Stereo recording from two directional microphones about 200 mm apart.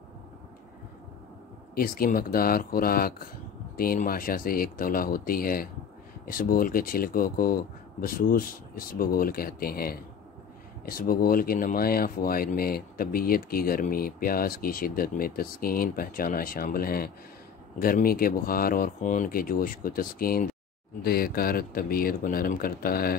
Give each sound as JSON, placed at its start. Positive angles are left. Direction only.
{"t": 1.8, "sound": "speech", "side_deg": 45}